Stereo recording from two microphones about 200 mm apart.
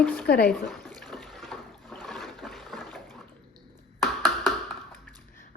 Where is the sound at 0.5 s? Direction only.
Centre (ahead or behind).